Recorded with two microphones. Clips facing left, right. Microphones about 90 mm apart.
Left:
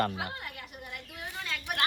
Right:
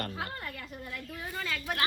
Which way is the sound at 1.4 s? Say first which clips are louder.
Even; 20° left (ahead or behind).